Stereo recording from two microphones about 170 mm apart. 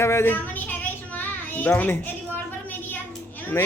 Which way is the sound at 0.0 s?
15° left (ahead or behind).